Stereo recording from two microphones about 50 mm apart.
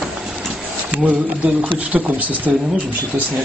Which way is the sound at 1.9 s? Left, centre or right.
Centre.